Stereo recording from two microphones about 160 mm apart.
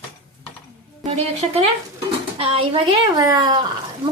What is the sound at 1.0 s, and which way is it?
Speech, 40° right (ahead or behind).